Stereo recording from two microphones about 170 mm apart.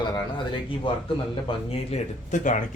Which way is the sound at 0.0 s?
30° left (ahead or behind).